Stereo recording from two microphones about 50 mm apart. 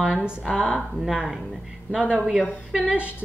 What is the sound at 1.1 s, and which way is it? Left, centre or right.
Speech, centre.